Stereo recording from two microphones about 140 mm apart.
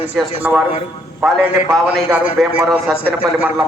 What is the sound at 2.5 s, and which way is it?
Speech, 10° right (ahead or behind).